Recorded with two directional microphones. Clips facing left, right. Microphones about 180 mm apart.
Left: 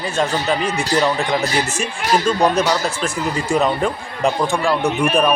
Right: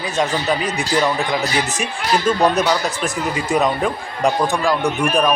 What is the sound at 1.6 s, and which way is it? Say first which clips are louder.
Speech: even; 15° right (ahead or behind).